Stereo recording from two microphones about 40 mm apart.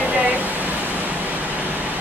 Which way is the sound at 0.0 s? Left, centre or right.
Right.